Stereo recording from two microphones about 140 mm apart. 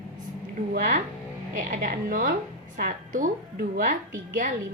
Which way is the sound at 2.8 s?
80° right.